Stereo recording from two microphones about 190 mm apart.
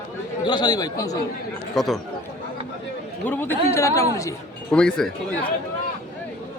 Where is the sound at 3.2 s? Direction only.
10° left (ahead or behind).